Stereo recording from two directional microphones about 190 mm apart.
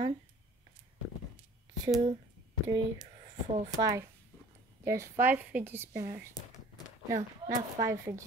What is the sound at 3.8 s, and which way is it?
A woman's voice, 15° right (ahead or behind).